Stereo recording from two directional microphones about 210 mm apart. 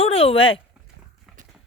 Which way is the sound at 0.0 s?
25° left (ahead or behind).